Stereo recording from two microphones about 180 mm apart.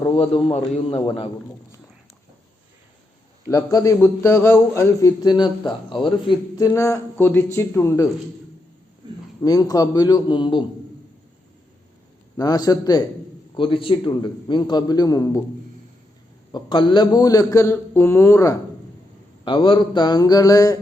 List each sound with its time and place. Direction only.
0.5 s a man's voice: 30° left (ahead or behind)
3.5 s a man's voice: 20° left (ahead or behind)
9.4 s a man's voice: 20° left (ahead or behind)
12.4 s a man's voice: 20° left (ahead or behind)
16.5 s a man's voice: 25° left (ahead or behind)
19.5 s a man's voice: 30° left (ahead or behind)